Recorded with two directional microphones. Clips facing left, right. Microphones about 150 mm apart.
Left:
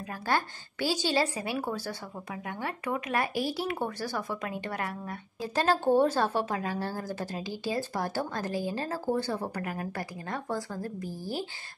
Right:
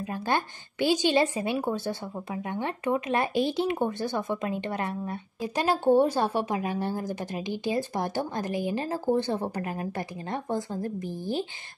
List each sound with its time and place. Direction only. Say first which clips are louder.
0.0 s speech: right 2 dB; 20° right (ahead or behind)
5.5 s speech: right 2 dB; 15° right (ahead or behind)